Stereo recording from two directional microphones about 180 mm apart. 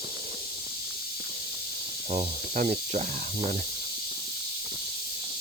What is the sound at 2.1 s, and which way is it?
Speech, 40° right (ahead or behind).